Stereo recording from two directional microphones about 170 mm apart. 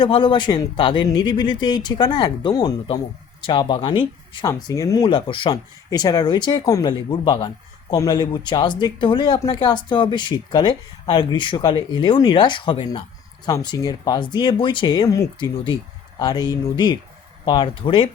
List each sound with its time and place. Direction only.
0.0 s speech: 30° left (ahead or behind)